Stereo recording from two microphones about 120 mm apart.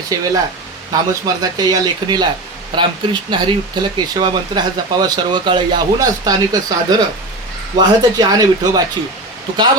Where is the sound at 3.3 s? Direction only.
40° right (ahead or behind).